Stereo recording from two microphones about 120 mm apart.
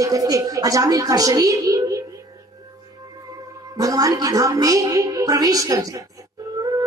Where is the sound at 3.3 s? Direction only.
30° right (ahead or behind).